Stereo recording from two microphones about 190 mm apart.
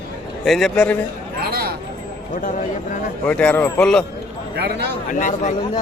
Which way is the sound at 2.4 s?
45° left (ahead or behind).